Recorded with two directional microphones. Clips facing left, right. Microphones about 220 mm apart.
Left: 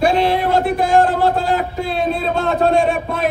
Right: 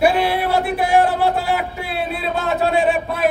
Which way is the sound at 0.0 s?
10° right (ahead or behind).